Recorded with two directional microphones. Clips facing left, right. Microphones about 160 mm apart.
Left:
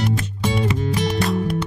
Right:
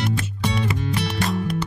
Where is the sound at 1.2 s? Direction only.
Centre (ahead or behind).